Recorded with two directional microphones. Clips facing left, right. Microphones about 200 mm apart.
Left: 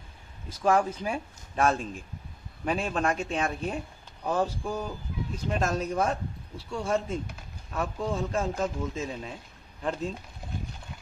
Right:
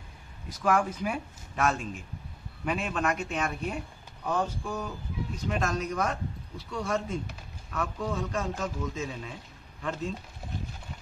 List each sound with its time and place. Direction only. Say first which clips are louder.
0.5 s speech: left 2 dB; 30° left (ahead or behind)